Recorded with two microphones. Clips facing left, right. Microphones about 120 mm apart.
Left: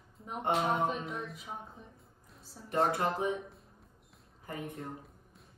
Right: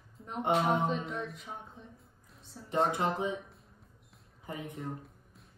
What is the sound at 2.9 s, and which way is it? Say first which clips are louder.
Speech: even; 20° right (ahead or behind).